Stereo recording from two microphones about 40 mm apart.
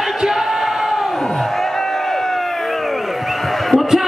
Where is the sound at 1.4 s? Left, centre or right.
Centre.